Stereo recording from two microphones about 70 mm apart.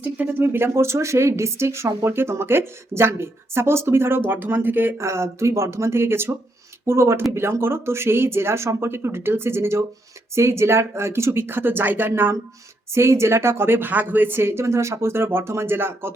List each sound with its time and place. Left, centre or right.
0.0 s speech: right
4.9 s speech: right